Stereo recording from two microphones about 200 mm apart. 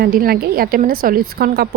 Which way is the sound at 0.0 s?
50° right (ahead or behind).